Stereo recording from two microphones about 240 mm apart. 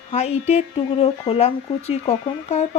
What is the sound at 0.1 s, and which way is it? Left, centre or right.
Speech, left.